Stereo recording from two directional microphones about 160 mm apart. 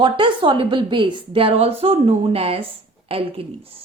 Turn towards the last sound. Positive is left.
turn(degrees=-35)  # may be behind; listen again after turning